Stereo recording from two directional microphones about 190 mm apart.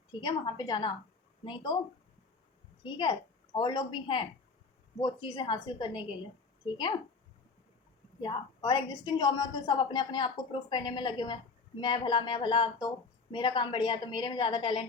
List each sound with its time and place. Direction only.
0.2 s a woman's voice: 20° left (ahead or behind)
2.8 s a woman's voice: 25° left (ahead or behind)
8.2 s a woman's voice: 20° left (ahead or behind)